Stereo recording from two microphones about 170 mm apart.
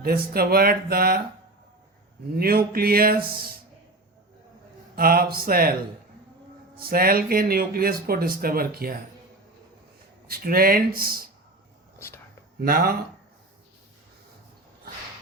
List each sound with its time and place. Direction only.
0.0 s speech: 60° right (ahead or behind)
2.3 s speech: 60° right (ahead or behind)
4.9 s speech: 60° right (ahead or behind)
6.7 s speech: 60° right (ahead or behind)
10.2 s speech: 60° right (ahead or behind)
11.9 s whispering: 15° left (ahead or behind)
12.6 s speech: 60° right (ahead or behind)